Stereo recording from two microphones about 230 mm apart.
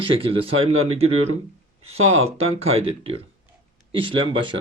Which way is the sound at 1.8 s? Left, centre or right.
Right.